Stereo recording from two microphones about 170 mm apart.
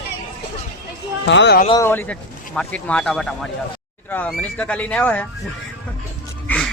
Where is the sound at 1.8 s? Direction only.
10° left (ahead or behind).